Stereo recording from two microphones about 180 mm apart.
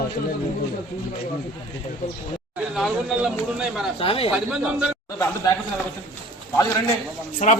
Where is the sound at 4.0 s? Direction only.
30° left (ahead or behind).